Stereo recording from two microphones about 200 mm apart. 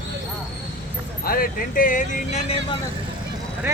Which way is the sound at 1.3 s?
45° left (ahead or behind).